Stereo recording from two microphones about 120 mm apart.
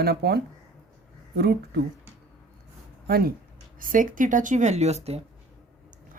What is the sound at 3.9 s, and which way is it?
Speech, 90° right.